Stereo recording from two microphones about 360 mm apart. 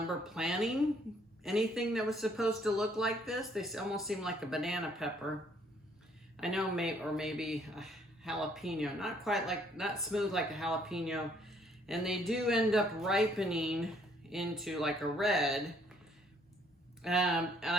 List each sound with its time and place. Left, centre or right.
0.3 s speech: centre
6.4 s speech: centre
17.0 s speech: centre